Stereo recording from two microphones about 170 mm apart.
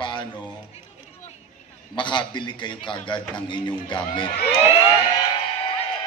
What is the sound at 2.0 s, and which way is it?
A man's voice, 30° left (ahead or behind).